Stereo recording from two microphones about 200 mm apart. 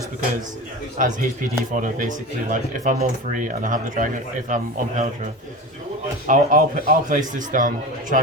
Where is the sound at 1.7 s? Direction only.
40° right (ahead or behind).